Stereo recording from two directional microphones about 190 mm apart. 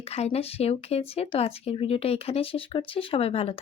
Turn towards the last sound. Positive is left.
turn(degrees=30)  # may be behind; listen again after turning